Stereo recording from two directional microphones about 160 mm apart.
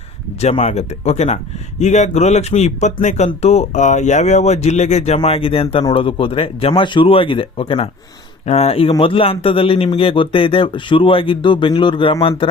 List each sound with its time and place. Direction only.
0.3 s a man's voice: 40° left (ahead or behind)